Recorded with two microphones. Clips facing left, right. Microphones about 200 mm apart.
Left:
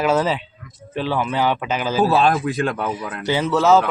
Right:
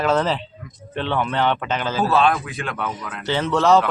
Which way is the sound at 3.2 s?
10° left (ahead or behind).